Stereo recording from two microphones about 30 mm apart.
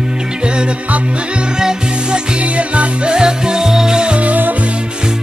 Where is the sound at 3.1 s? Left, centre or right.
Right.